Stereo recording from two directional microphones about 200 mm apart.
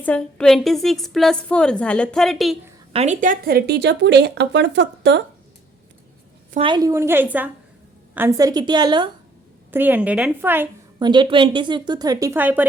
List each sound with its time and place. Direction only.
0.0 s a woman's voice: 5° left (ahead or behind)
2.9 s speech: 35° right (ahead or behind); by 5.2 s 60° right (ahead or behind)
6.6 s a woman's voice: 20° right (ahead or behind)
9.7 s a woman's voice: 10° right (ahead or behind)
11.0 s speech: 25° right (ahead or behind)